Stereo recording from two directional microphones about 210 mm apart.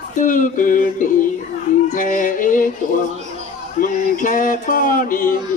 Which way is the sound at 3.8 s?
40° left (ahead or behind).